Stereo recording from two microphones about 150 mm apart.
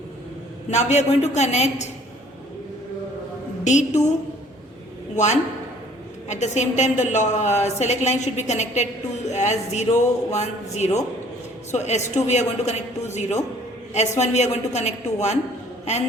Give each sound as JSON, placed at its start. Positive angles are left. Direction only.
{"t": 0.7, "sound": "a woman's voice", "side_deg": 50}
{"t": 3.6, "sound": "a woman's voice", "side_deg": 50}
{"t": 5.1, "sound": "a woman's voice", "side_deg": 50}